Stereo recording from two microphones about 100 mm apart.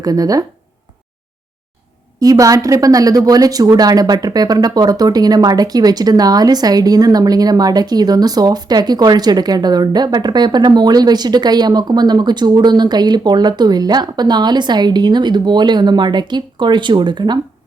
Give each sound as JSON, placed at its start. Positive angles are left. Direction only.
{"t": 0.0, "sound": "speech", "side_deg": -40}
{"t": 2.1, "sound": "speech", "side_deg": -35}